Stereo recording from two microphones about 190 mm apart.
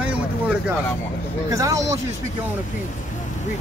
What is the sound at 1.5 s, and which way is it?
Speech, 15° right (ahead or behind).